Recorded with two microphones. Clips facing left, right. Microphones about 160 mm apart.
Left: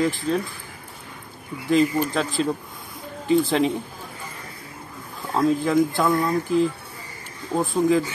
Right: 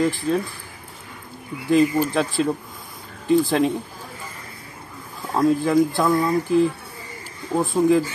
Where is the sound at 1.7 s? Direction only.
10° right (ahead or behind).